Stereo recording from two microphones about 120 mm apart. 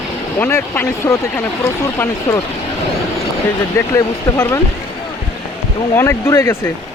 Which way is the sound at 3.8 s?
25° left (ahead or behind).